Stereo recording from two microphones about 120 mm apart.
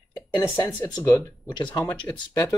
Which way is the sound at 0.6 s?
35° left (ahead or behind).